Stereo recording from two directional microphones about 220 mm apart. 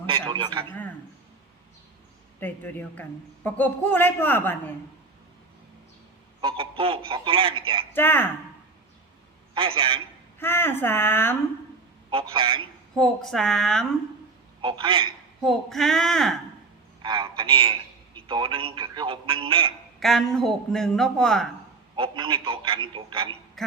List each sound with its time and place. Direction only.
0.0 s a man's voice: 20° right (ahead or behind)
2.4 s a man's voice: 10° left (ahead or behind)
6.4 s a man's voice: 25° right (ahead or behind)
7.9 s a man's voice: 10° left (ahead or behind)
9.6 s a man's voice: 25° right (ahead or behind)
10.4 s a man's voice: 10° left (ahead or behind)
12.1 s a man's voice: 25° right (ahead or behind)
13.0 s a man's voice: centre (ahead or behind)
14.6 s a man's voice: 20° right (ahead or behind)
15.4 s a man's voice: centre (ahead or behind)
17.0 s a man's voice: 20° right (ahead or behind)
20.0 s a man's voice: centre (ahead or behind)
21.9 s a man's voice: 20° right (ahead or behind)
23.6 s a sound: centre (ahead or behind)